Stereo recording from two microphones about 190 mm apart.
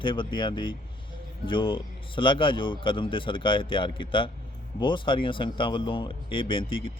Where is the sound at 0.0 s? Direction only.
25° left (ahead or behind).